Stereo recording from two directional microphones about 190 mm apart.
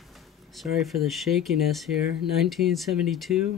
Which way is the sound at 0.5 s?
Centre (ahead or behind).